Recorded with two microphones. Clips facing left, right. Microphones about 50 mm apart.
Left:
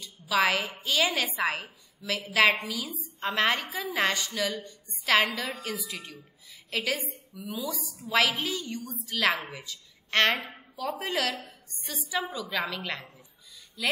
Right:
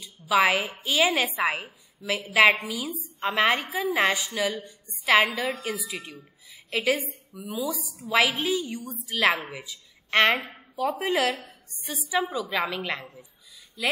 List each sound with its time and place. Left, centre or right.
0.0 s a woman's voice: centre
7.5 s a woman's voice: centre
10.3 s a woman's voice: right
10.8 s a woman's voice: centre